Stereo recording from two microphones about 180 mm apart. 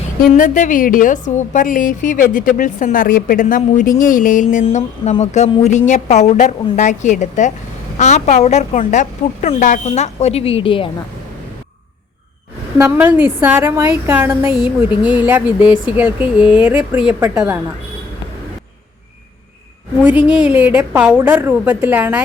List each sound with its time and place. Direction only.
0.2 s a woman's voice: 45° left (ahead or behind)
4.6 s a woman's voice: 35° left (ahead or behind)
12.8 s a woman's voice: 10° right (ahead or behind)
20.1 s a woman's voice: 5° right (ahead or behind)